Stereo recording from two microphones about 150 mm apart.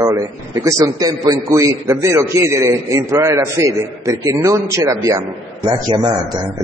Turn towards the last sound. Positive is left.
turn(degrees=-30)  # may be behind; listen again after turning